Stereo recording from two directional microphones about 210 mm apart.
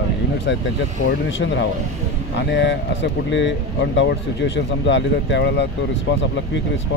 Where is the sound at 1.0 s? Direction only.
60° left (ahead or behind).